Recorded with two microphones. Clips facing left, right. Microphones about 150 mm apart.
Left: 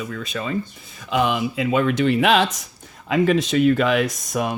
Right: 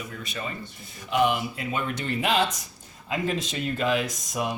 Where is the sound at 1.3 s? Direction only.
90° left; by 4.5 s 65° left (ahead or behind).